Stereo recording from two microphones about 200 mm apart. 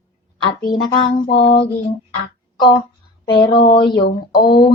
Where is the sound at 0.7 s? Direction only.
20° left (ahead or behind).